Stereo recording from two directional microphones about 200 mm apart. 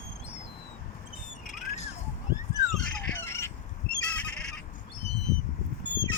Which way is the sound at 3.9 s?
50° left (ahead or behind).